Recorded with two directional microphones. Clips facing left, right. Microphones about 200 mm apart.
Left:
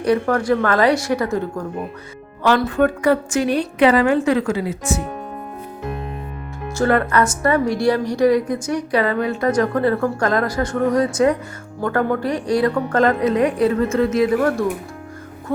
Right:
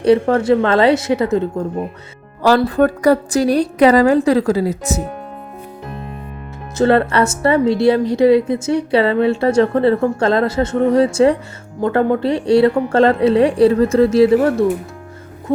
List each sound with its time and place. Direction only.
0.0 s speech: 25° right (ahead or behind)
2.4 s a woman's voice: 35° right (ahead or behind)
6.7 s speech: 25° right (ahead or behind)
15.5 s a sound: 20° right (ahead or behind)